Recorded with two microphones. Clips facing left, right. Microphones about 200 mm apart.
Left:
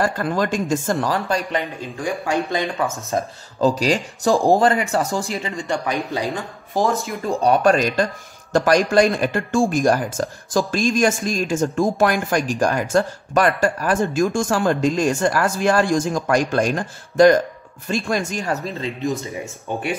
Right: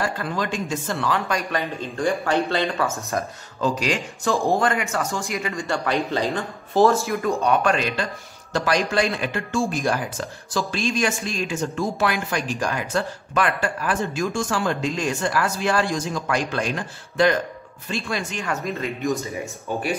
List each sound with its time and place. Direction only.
0.0 s speech: 45° left (ahead or behind)
1.8 s speech: 10° left (ahead or behind)
3.6 s speech: 35° left (ahead or behind)
5.4 s speech: 20° left (ahead or behind)
7.2 s speech: 35° left (ahead or behind)